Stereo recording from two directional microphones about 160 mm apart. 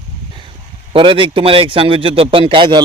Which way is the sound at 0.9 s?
35° right (ahead or behind).